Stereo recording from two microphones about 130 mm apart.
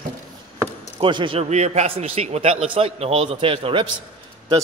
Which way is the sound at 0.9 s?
40° right (ahead or behind).